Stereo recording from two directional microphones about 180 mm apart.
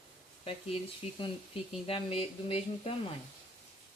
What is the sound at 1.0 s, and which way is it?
Speech, 35° left (ahead or behind).